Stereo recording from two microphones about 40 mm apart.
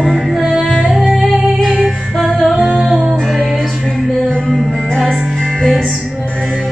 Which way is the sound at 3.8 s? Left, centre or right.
Centre.